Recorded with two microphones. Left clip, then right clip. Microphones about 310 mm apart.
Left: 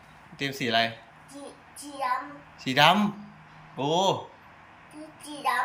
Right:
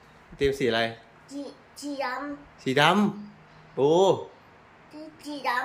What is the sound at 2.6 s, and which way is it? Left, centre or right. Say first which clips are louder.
Speech: left 1 dB; centre.